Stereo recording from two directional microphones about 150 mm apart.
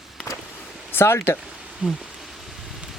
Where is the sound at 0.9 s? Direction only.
15° left (ahead or behind).